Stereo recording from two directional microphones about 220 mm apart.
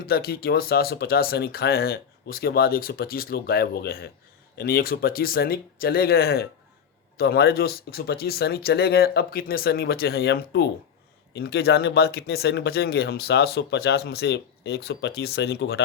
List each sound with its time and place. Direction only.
0.0 s speech: 45° left (ahead or behind)